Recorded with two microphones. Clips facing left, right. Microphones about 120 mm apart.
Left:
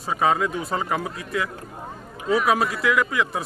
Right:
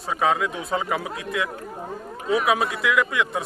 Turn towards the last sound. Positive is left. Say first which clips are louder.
# even
turn(degrees=0)  # may be behind; listen again after turning